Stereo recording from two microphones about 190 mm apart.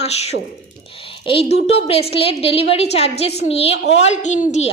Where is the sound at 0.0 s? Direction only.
35° left (ahead or behind).